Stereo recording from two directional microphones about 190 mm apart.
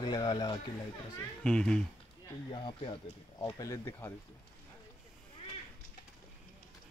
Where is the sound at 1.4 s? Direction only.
5° left (ahead or behind).